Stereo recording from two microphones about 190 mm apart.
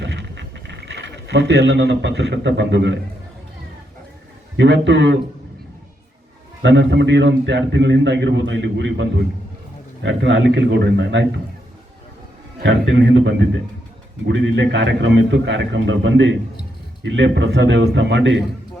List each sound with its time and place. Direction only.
0.0 s vehicle: 65° right (ahead or behind)
4.5 s a man's voice: 65° right (ahead or behind)
6.6 s a man's voice: 65° right (ahead or behind)
12.5 s a man's voice: 65° right (ahead or behind)